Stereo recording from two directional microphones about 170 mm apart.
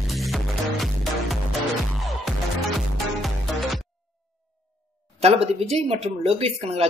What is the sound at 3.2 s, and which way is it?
Music, centre (ahead or behind).